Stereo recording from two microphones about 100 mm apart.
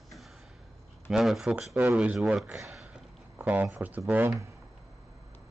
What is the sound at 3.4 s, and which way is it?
Speech, 15° right (ahead or behind).